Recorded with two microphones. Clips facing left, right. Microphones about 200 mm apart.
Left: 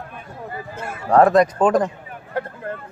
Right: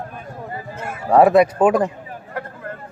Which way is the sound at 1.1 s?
10° right (ahead or behind).